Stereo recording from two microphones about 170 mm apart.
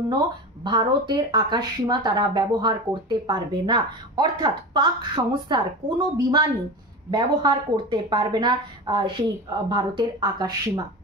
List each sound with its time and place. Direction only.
0.7 s speech: 25° right (ahead or behind)